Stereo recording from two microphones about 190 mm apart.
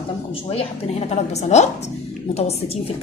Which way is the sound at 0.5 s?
35° left (ahead or behind).